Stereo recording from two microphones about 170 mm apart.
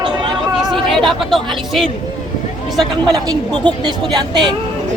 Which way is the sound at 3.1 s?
25° right (ahead or behind).